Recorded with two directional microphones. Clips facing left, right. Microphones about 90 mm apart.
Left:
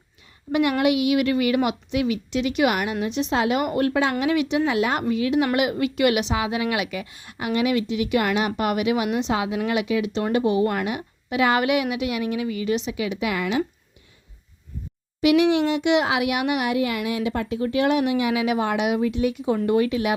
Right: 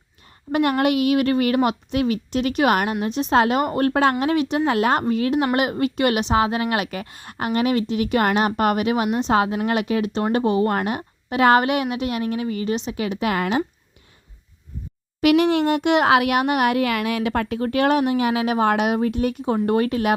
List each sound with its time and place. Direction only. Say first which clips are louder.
0.5 s a child's voice: right 1 dB; 45° right (ahead or behind)
15.2 s a child's voice: right 1 dB; 50° right (ahead or behind)